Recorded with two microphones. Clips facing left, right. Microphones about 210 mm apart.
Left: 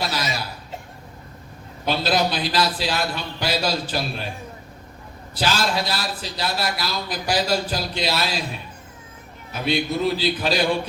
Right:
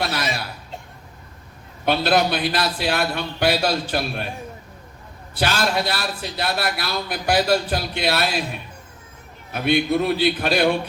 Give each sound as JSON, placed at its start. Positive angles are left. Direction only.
{"t": 1.8, "sound": "a man's voice", "side_deg": -60}
{"t": 5.3, "sound": "a man's voice", "side_deg": -60}
{"t": 9.5, "sound": "a man's voice", "side_deg": -55}